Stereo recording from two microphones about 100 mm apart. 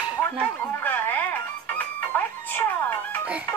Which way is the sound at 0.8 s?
20° left (ahead or behind).